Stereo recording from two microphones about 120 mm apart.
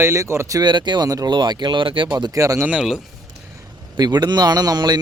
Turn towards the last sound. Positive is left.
turn(degrees=-35)  # may be behind; listen again after turning